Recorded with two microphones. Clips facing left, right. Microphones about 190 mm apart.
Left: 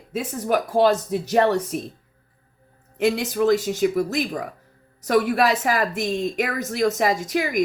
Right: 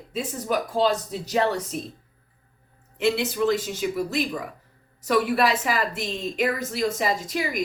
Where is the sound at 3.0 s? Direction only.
45° left (ahead or behind).